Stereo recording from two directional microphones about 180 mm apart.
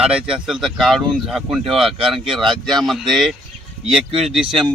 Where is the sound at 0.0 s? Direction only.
5° right (ahead or behind).